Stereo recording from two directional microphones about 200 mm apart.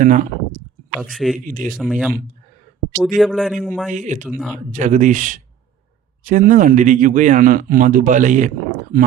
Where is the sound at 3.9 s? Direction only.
40° right (ahead or behind).